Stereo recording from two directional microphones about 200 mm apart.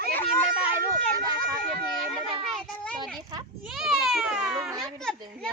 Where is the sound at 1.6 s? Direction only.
5° left (ahead or behind).